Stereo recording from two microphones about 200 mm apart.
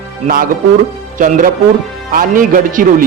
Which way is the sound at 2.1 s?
45° right (ahead or behind).